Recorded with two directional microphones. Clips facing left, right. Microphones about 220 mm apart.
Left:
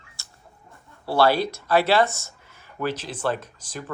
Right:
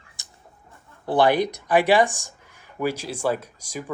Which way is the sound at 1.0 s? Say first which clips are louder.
Right 1 dB; 15° right (ahead or behind).